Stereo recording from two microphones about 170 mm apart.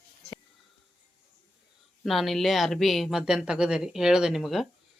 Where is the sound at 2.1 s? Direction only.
Centre (ahead or behind).